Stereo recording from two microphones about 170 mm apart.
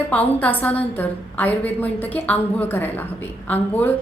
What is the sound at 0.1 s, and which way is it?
A woman's voice, 10° left (ahead or behind).